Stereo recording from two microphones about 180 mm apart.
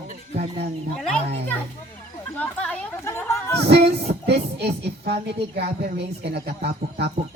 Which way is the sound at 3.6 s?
65° right (ahead or behind).